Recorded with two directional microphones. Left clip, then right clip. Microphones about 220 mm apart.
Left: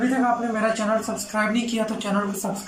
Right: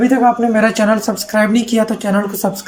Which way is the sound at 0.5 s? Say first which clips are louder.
Right 9 dB; 40° right (ahead or behind).